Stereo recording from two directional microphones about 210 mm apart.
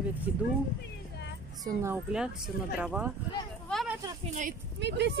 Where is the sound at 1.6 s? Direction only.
10° right (ahead or behind).